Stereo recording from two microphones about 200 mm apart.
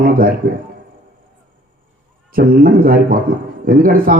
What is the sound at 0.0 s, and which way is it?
Speech, 45° right (ahead or behind).